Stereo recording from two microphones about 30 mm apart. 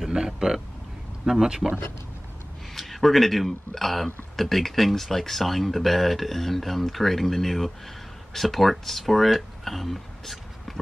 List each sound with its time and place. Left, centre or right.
0.0 s speech: right
2.7 s speech: centre